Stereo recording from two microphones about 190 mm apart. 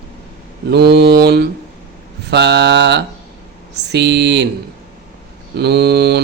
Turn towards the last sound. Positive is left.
turn(degrees=-60)  # may be behind; listen again after turning